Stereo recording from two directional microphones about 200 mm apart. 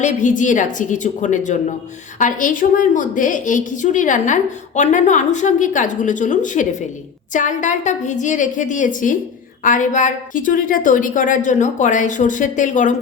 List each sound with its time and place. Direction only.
0.0 s a woman's voice: 40° left (ahead or behind)